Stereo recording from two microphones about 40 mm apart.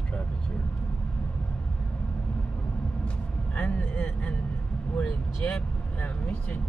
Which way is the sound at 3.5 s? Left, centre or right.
Left.